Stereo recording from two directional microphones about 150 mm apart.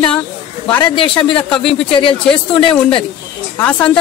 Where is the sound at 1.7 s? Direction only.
35° left (ahead or behind).